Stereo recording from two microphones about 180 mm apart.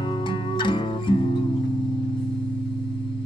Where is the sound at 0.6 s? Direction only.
25° left (ahead or behind).